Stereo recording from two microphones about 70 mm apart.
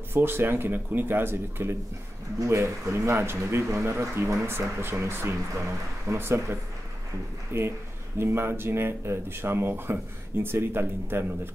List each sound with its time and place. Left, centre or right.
0.1 s speech: right